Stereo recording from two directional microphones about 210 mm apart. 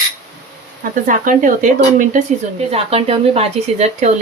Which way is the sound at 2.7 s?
30° right (ahead or behind).